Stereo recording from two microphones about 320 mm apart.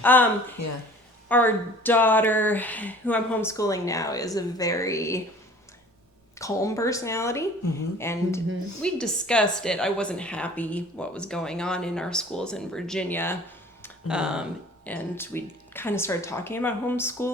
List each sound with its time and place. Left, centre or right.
0.0 s speech: centre
0.6 s speech: left
1.3 s speech: centre
6.4 s speech: centre